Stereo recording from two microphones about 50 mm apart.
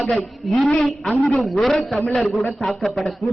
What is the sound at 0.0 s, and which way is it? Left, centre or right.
A man's voice, centre.